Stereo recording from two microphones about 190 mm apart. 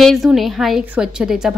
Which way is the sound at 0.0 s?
Centre (ahead or behind).